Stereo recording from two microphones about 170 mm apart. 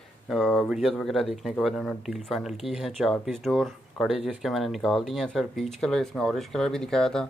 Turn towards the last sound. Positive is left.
turn(degrees=5)  # may be behind; listen again after turning